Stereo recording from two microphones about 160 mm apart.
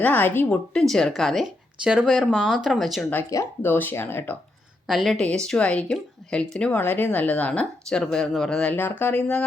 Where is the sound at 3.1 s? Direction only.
15° left (ahead or behind).